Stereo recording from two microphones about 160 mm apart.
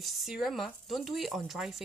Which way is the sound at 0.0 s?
Centre (ahead or behind).